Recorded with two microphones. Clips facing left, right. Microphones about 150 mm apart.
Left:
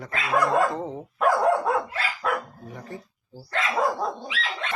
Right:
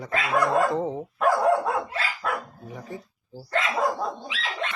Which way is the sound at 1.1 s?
Centre (ahead or behind).